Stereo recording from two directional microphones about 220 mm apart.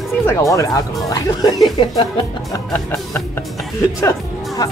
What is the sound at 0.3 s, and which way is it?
Speech, 15° left (ahead or behind).